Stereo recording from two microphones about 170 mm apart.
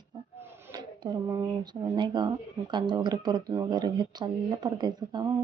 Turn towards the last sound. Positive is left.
turn(degrees=-25)  # may be behind; listen again after turning